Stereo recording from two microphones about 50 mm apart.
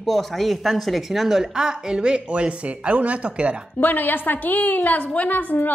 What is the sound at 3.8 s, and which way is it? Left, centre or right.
A woman's voice, left.